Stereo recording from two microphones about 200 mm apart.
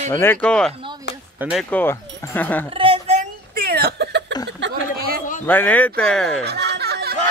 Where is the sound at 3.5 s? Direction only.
50° right (ahead or behind).